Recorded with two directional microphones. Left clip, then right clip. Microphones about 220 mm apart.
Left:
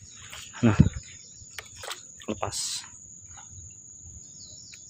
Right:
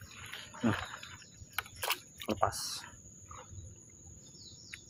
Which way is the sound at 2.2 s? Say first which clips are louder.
Left 1 dB; 25° left (ahead or behind).